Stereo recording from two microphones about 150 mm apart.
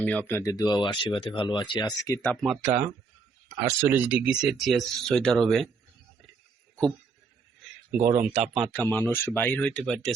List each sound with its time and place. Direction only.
0.0 s speech: 10° left (ahead or behind)
2.2 s speech: centre (ahead or behind)
3.6 s speech: 15° right (ahead or behind); by 5.7 s centre (ahead or behind)
8.0 s speech: 15° right (ahead or behind)
8.3 s speech: 5° right (ahead or behind)
8.7 s speech: 10° left (ahead or behind)